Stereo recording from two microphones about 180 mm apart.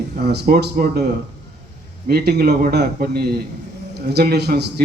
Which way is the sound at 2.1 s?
65° right (ahead or behind).